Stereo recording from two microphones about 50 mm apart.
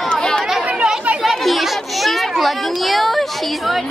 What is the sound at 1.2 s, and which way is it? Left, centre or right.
Children playing, centre.